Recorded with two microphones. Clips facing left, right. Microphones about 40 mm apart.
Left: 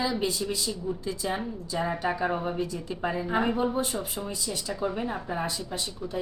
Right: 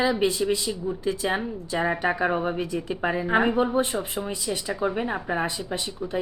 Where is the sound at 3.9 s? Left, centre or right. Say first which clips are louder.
Right 4 dB; right.